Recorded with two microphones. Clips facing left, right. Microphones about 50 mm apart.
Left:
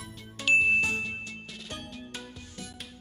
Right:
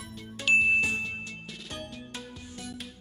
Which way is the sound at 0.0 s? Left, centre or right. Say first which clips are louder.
Even; centre.